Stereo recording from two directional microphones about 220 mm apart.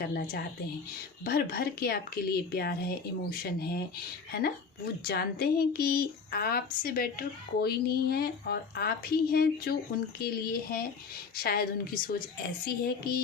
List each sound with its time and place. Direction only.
0.0 s speech: 45° left (ahead or behind)